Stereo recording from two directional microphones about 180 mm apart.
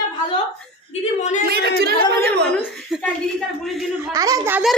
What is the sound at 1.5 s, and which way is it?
Speech, 60° right (ahead or behind).